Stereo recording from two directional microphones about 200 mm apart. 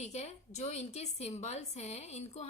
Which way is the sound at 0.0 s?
35° left (ahead or behind).